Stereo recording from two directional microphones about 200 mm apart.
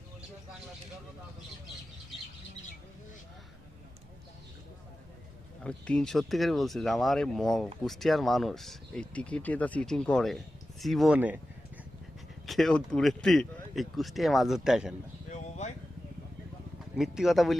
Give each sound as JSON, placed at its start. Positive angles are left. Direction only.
{"t": 5.6, "sound": "speech", "side_deg": 5}
{"t": 12.5, "sound": "speech", "side_deg": 0}
{"t": 15.3, "sound": "a sound", "side_deg": 35}
{"t": 17.0, "sound": "speech", "side_deg": 0}